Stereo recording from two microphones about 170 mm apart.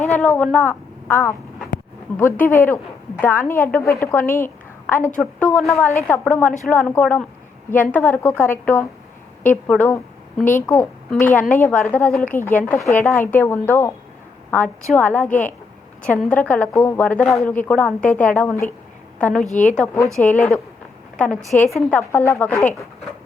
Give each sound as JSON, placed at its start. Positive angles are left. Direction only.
{"t": 0.2, "sound": "a woman's voice", "side_deg": 5}
{"t": 19.5, "sound": "speech", "side_deg": 45}
{"t": 19.7, "sound": "a woman's voice", "side_deg": 5}